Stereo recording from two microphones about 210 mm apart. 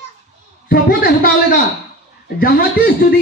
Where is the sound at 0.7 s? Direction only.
45° left (ahead or behind).